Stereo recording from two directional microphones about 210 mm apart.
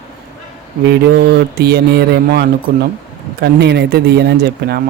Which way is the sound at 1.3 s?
50° right (ahead or behind).